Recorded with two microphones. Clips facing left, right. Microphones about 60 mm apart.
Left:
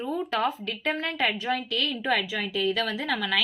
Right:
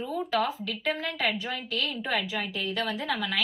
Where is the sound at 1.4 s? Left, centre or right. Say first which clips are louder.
Left 4 dB; left.